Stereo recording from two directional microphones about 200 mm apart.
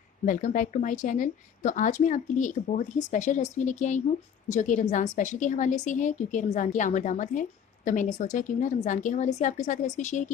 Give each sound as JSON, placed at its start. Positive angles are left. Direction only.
{"t": 0.2, "sound": "a woman's voice", "side_deg": 40}